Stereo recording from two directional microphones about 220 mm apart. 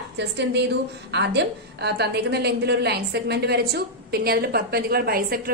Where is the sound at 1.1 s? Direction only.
50° right (ahead or behind).